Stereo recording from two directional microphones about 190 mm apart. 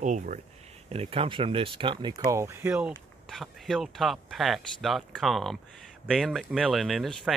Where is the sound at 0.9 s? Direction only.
30° right (ahead or behind).